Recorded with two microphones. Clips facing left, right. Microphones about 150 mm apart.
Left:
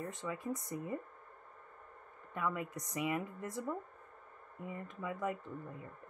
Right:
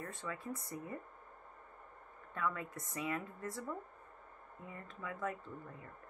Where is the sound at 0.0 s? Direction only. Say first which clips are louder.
Left 4 dB; 20° left (ahead or behind).